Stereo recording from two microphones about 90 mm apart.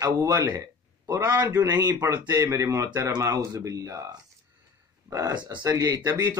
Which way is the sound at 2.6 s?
35° right (ahead or behind).